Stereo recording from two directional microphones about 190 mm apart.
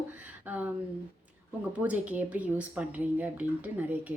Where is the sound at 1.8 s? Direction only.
10° right (ahead or behind).